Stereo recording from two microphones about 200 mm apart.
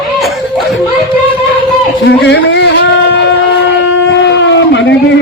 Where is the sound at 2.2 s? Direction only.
60° left (ahead or behind).